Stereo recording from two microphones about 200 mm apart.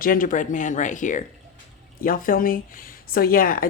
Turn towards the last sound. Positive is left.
turn(degrees=45)  # may be behind; listen again after turning